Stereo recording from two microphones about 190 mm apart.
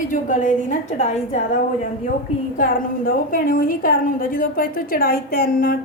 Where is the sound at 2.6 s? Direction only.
50° left (ahead or behind).